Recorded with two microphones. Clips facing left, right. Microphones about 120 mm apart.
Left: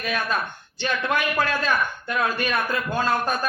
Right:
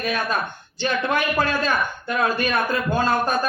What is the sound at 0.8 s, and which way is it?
A man's voice, 30° right (ahead or behind).